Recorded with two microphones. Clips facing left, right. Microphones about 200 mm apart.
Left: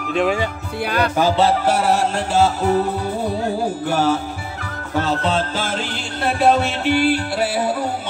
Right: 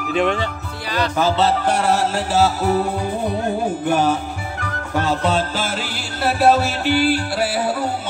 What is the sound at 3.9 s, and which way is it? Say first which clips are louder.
Music: right 1 dB; 15° right (ahead or behind).